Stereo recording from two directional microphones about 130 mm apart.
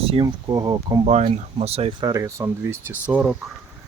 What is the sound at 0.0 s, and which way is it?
Speech, 45° right (ahead or behind).